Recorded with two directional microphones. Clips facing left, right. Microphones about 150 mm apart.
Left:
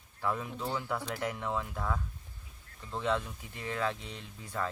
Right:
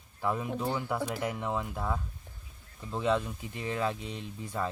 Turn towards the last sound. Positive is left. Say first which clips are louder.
# right 3 dB
turn(degrees=-15)  # may be behind; listen again after turning